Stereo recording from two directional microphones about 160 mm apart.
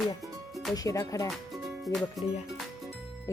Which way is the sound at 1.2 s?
Centre (ahead or behind).